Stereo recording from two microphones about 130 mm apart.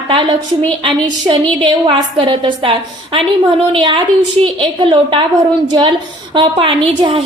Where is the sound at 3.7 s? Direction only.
35° right (ahead or behind).